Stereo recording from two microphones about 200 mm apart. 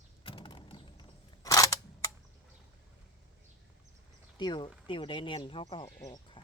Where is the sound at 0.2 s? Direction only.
25° left (ahead or behind).